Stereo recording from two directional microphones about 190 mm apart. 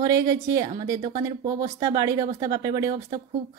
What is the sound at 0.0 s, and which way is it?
Speech, 15° right (ahead or behind).